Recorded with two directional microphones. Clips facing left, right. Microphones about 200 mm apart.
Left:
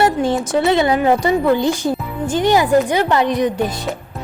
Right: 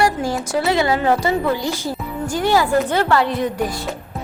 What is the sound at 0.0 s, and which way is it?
A woman's voice, 25° left (ahead or behind).